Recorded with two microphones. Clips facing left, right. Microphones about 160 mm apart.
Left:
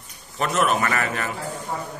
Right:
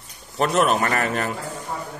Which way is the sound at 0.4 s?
35° right (ahead or behind).